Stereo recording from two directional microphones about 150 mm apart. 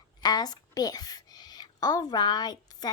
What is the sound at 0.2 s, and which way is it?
A woman's voice, 25° left (ahead or behind).